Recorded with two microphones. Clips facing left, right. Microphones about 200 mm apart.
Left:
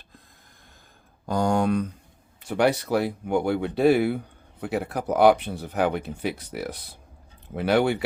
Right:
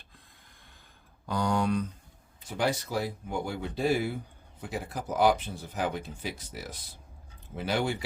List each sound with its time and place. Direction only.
1.3 s speech: 45° left (ahead or behind)
2.4 s speech: 65° left (ahead or behind)